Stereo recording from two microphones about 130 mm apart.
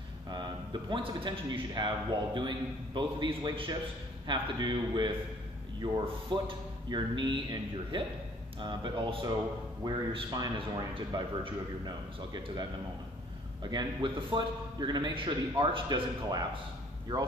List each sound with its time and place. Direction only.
0.8 s a man's voice: 40° right (ahead or behind)
6.4 s a man's voice: 35° right (ahead or behind)
13.7 s a man's voice: 35° right (ahead or behind)